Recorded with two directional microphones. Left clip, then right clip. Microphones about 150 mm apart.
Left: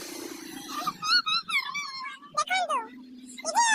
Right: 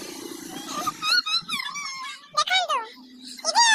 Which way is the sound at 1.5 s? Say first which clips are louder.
Left 1 dB; 70° right (ahead or behind).